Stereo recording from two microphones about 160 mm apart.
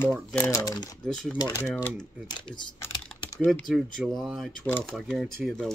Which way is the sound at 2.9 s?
30° left (ahead or behind).